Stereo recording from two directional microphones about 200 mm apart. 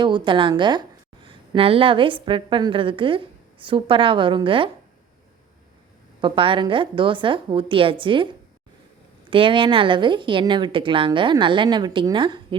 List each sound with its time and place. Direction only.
0.0 s a woman's voice: 25° right (ahead or behind)
6.2 s a woman's voice: 25° right (ahead or behind)
9.3 s a woman's voice: 25° right (ahead or behind)